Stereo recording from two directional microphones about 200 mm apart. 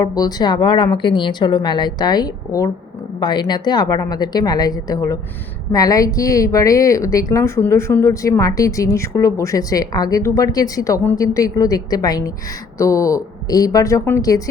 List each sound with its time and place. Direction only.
0.0 s a woman's voice: 20° left (ahead or behind)